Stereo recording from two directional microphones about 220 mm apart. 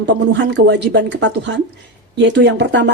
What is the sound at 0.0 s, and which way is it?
A woman's voice, 55° right (ahead or behind).